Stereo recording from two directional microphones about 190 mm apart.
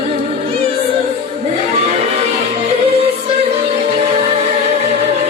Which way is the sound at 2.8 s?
30° right (ahead or behind).